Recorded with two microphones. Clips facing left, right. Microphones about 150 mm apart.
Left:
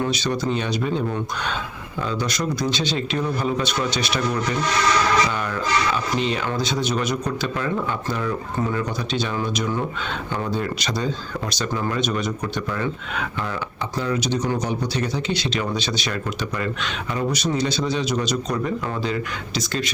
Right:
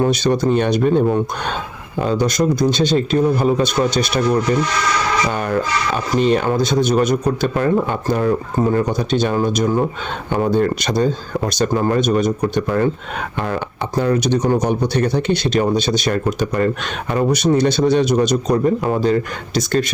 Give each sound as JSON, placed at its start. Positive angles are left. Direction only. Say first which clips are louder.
{"t": 0.0, "sound": "speech", "louder": "right 7 dB", "side_deg": -50}